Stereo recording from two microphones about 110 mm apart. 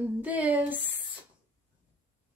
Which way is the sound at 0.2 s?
15° right (ahead or behind).